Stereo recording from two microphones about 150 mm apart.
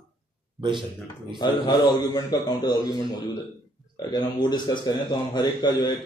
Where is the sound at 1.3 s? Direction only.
30° left (ahead or behind).